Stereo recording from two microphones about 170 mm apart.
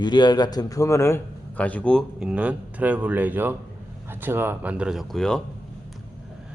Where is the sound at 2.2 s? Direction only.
5° right (ahead or behind).